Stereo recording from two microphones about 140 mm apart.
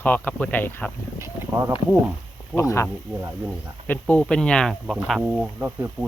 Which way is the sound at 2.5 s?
20° left (ahead or behind).